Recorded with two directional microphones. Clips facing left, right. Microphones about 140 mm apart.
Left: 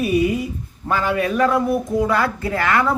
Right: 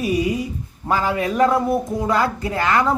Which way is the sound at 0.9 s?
25° right (ahead or behind).